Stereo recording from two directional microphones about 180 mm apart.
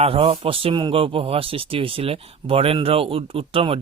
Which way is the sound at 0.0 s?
35° right (ahead or behind).